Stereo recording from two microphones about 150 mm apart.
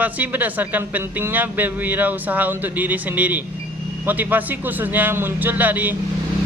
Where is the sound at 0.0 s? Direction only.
10° right (ahead or behind).